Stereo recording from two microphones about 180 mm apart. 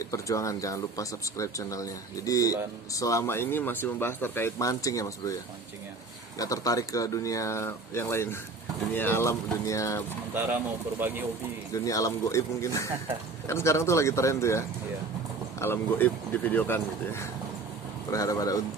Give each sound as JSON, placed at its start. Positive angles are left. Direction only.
{"t": 0.0, "sound": "speech", "side_deg": 15}
{"t": 6.4, "sound": "speech", "side_deg": 20}
{"t": 11.7, "sound": "speech", "side_deg": 20}